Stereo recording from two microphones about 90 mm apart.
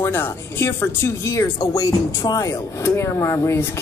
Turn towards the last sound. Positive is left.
turn(degrees=30)  # may be behind; listen again after turning